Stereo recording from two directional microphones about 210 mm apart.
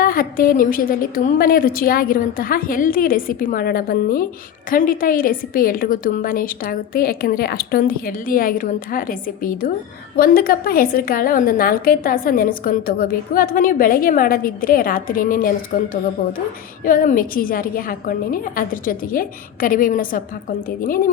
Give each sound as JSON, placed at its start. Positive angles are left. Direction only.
{"t": 0.0, "sound": "a woman's voice", "side_deg": 45}